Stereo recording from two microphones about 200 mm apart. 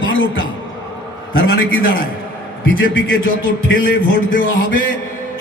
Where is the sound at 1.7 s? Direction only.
75° left (ahead or behind).